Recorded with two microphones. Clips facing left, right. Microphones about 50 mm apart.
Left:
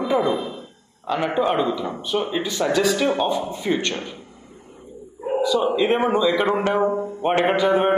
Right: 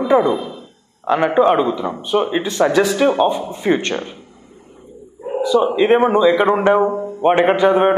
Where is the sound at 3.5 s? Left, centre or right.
Right.